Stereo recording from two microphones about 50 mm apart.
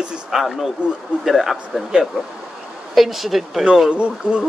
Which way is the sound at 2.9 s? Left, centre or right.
Centre.